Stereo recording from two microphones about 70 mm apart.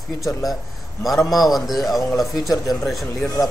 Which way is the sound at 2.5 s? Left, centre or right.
Left.